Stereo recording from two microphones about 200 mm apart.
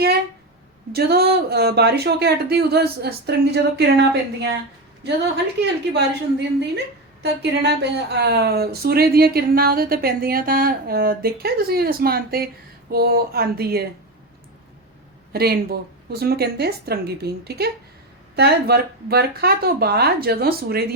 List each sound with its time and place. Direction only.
0.9 s a woman's voice: 50° right (ahead or behind)
15.3 s a woman's voice: 50° right (ahead or behind)